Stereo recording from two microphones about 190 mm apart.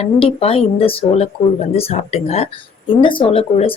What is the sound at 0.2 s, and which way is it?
Speech, 30° left (ahead or behind).